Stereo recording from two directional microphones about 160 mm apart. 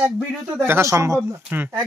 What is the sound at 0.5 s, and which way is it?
Speech, 15° right (ahead or behind).